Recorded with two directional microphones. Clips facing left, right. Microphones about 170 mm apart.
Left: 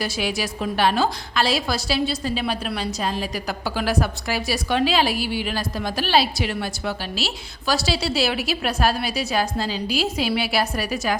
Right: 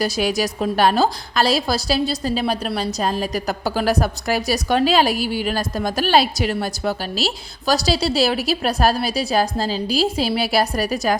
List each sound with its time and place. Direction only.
0.0 s a woman's voice: 40° right (ahead or behind)